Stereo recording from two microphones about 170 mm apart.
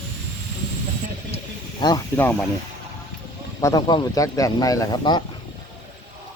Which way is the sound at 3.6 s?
20° left (ahead or behind).